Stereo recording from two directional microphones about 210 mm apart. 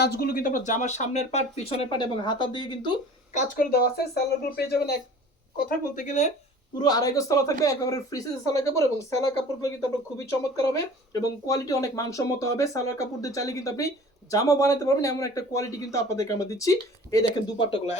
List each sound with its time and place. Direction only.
0.0 s speech: 50° left (ahead or behind); by 3.0 s 20° left (ahead or behind)
3.3 s speech: 45° left (ahead or behind)
6.7 s speech: 20° left (ahead or behind)